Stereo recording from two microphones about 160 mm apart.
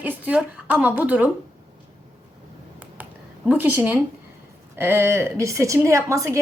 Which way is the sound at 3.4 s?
10° right (ahead or behind).